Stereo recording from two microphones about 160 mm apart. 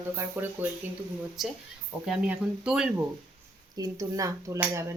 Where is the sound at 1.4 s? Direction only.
Centre (ahead or behind).